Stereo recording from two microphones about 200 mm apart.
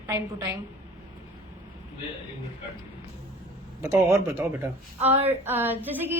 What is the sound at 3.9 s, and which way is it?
Speech, 5° right (ahead or behind).